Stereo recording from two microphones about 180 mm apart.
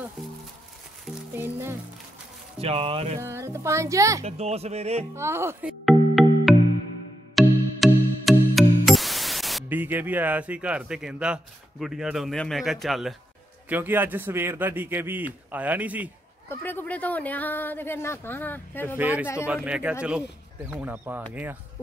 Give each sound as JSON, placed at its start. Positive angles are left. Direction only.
{"t": 1.3, "sound": "speech", "side_deg": -10}
{"t": 2.6, "sound": "speech", "side_deg": -35}
{"t": 3.2, "sound": "a man's voice", "side_deg": -15}
{"t": 4.2, "sound": "speech", "side_deg": -35}
{"t": 5.1, "sound": "music", "side_deg": -15}
{"t": 12.8, "sound": "speech", "side_deg": 0}
{"t": 13.7, "sound": "a man's voice", "side_deg": -10}
{"t": 16.4, "sound": "speech", "side_deg": 10}
{"t": 18.9, "sound": "a man's voice", "side_deg": -10}